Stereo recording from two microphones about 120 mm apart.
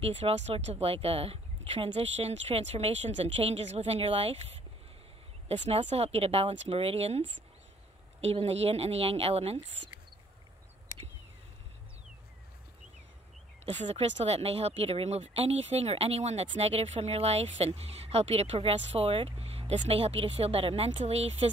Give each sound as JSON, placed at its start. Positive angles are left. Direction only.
{"t": 0.0, "sound": "speech", "side_deg": -60}
{"t": 13.8, "sound": "speech", "side_deg": -60}